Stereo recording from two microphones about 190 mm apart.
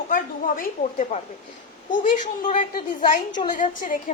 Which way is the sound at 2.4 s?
40° left (ahead or behind).